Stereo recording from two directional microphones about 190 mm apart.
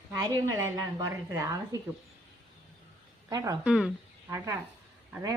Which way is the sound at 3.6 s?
5° right (ahead or behind).